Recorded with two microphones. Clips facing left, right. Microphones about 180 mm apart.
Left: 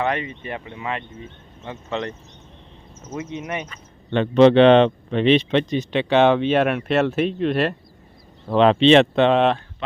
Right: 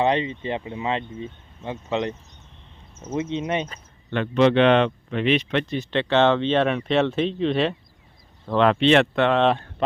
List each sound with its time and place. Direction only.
0.0 s speech: 25° right (ahead or behind)
3.2 s speech: 25° right (ahead or behind)
4.1 s speech: 30° left (ahead or behind); by 7.8 s 5° left (ahead or behind)
8.4 s speech: 20° left (ahead or behind)